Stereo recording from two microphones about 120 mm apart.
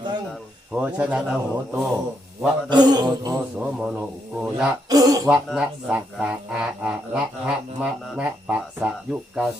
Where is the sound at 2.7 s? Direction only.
35° right (ahead or behind).